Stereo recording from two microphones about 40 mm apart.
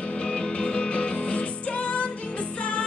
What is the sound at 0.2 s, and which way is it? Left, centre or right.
Music, left.